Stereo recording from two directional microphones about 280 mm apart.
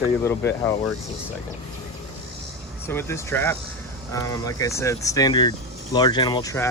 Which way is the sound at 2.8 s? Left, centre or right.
Centre.